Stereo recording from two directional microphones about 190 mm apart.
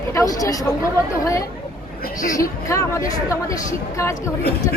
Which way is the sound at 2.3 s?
15° left (ahead or behind).